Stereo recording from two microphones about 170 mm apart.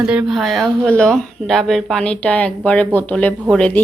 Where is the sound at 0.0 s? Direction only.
5° right (ahead or behind).